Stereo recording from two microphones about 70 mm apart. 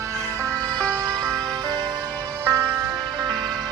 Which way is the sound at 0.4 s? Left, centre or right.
Right.